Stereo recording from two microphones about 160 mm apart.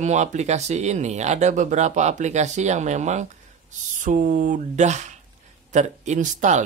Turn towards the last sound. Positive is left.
turn(degrees=-50)  # may be behind; listen again after turning